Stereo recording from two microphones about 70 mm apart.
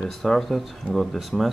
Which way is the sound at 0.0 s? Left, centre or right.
Centre.